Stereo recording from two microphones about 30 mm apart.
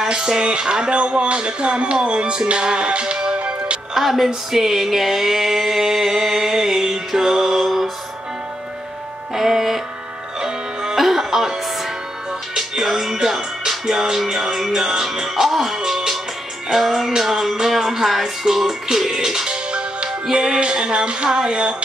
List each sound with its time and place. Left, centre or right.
0.2 s music: centre
3.3 s music: right
3.9 s music: centre
4.5 s a sound: centre
9.3 s a sound: centre
10.4 s music: right
11.0 s music: centre
12.5 s music: centre
14.0 s a sound: centre
14.8 s music: centre
16.7 s a sound: centre
19.5 s music: right